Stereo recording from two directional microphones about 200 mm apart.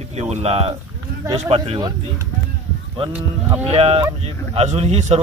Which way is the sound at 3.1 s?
10° right (ahead or behind).